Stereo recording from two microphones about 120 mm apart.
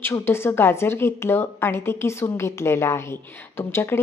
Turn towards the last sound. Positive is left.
turn(degrees=20)  # may be behind; listen again after turning